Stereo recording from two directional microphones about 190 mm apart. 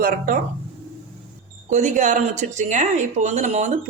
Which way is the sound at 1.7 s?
40° right (ahead or behind).